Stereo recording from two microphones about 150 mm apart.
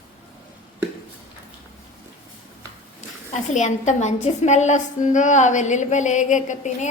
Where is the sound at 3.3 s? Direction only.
55° left (ahead or behind).